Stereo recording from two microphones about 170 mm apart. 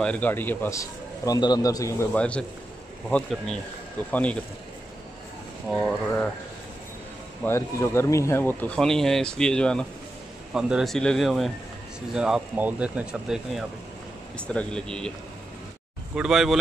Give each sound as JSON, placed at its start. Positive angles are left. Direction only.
{"t": 0.0, "sound": "speech", "side_deg": 10}
{"t": 5.8, "sound": "speech", "side_deg": 5}
{"t": 7.4, "sound": "speech", "side_deg": 15}
{"t": 16.2, "sound": "speech", "side_deg": 0}